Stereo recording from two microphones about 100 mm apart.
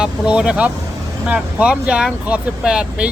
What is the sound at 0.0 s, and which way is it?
Speech, 10° right (ahead or behind).